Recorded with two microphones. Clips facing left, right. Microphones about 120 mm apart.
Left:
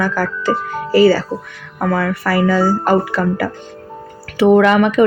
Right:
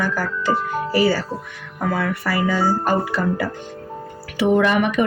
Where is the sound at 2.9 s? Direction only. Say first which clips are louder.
Left 5 dB; 90° left.